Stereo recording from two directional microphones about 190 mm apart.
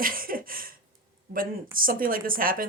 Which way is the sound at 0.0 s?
50° right (ahead or behind).